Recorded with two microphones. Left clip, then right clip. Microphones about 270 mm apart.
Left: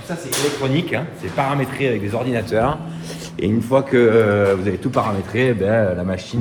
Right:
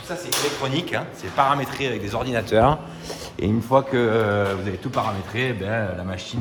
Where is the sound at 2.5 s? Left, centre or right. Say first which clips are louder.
Right 2 dB; right.